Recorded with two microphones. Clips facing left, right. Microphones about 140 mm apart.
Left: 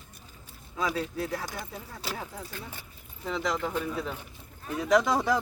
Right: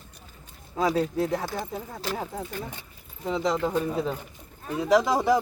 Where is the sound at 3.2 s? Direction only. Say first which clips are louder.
Right 5 dB; 25° right (ahead or behind).